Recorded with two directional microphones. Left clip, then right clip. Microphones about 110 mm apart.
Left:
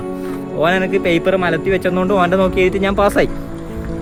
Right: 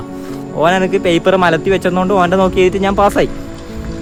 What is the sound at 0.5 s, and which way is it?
Speech, 10° right (ahead or behind).